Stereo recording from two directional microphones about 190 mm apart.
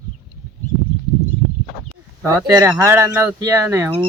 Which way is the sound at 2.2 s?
15° right (ahead or behind).